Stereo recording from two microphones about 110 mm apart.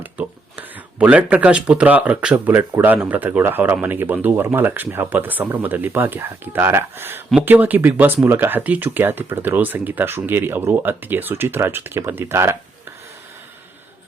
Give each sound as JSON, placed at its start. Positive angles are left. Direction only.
{"t": 0.0, "sound": "speech", "side_deg": -15}